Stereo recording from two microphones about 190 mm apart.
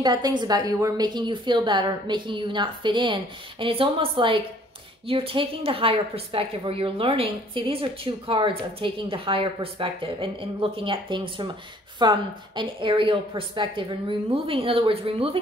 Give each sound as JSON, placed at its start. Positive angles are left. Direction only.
{"t": 0.0, "sound": "a woman's voice", "side_deg": -20}